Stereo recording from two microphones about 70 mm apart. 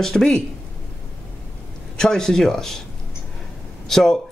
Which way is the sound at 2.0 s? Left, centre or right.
Centre.